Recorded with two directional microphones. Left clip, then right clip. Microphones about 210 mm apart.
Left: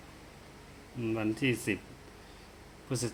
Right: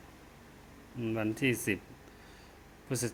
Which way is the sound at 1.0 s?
20° right (ahead or behind).